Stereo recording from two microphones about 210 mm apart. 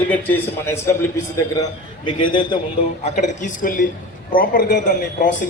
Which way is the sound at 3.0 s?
35° left (ahead or behind).